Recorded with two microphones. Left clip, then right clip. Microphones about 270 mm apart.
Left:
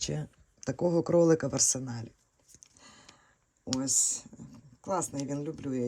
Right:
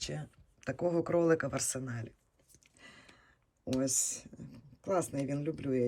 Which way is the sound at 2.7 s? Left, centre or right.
Centre.